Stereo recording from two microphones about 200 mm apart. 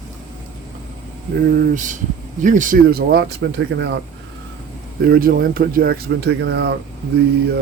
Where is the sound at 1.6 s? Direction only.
40° right (ahead or behind); by 4.0 s 60° right (ahead or behind).